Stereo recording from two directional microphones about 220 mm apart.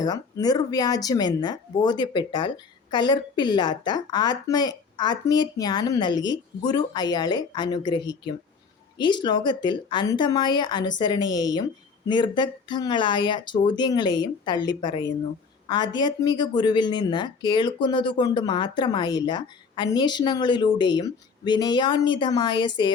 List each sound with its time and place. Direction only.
0.0 s a woman's voice: 15° left (ahead or behind)